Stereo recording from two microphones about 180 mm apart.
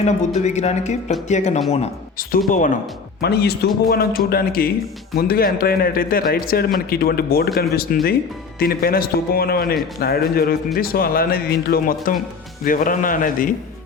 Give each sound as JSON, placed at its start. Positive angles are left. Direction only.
{"t": 0.3, "sound": "speech", "side_deg": 40}
{"t": 3.2, "sound": "a man's voice", "side_deg": 60}